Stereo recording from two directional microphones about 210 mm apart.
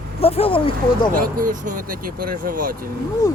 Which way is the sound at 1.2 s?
40° right (ahead or behind).